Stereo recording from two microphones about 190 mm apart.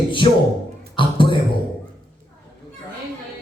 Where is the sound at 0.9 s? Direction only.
25° left (ahead or behind).